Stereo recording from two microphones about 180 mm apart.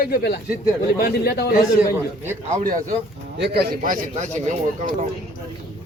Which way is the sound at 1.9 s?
10° right (ahead or behind).